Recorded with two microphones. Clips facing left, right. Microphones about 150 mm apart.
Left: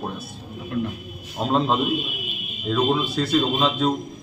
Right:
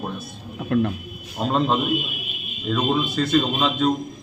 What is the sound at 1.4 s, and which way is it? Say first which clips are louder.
Speech: left 1 dB; centre (ahead or behind).